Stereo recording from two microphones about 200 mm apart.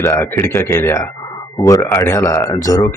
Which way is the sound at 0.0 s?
10° left (ahead or behind).